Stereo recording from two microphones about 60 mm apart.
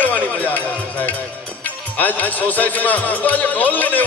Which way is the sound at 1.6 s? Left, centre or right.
Left.